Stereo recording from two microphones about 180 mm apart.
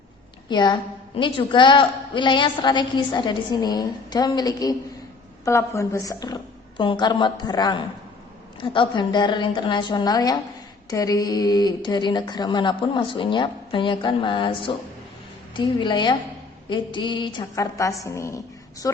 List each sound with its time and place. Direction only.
0.4 s a woman's voice: 25° left (ahead or behind)